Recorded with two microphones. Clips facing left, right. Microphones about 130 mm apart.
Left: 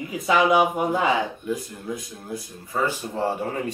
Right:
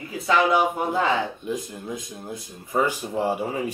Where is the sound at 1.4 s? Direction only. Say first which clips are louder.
Left 1 dB; 20° right (ahead or behind).